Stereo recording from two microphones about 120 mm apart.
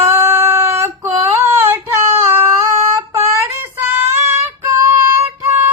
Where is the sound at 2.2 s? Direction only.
20° right (ahead or behind).